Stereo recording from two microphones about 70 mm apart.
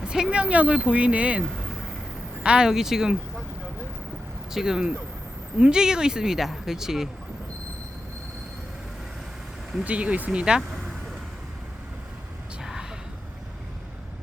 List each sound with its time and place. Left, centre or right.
0.0 s speech: centre
4.5 s speech: centre
9.8 s speech: centre
10.7 s vehicle: centre